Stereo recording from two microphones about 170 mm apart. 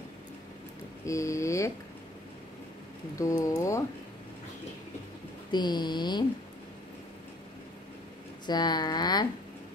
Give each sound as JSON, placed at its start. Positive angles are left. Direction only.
{"t": 1.0, "sound": "speech", "side_deg": 20}
{"t": 3.2, "sound": "speech", "side_deg": 20}
{"t": 5.5, "sound": "speech", "side_deg": 25}
{"t": 8.5, "sound": "speech", "side_deg": 25}